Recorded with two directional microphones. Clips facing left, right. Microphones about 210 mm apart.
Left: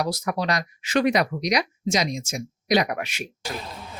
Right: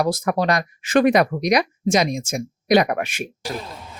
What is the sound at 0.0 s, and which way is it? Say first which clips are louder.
Speech: right 5 dB; 50° right (ahead or behind).